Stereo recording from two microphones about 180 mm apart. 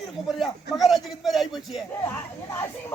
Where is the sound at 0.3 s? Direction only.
Centre (ahead or behind).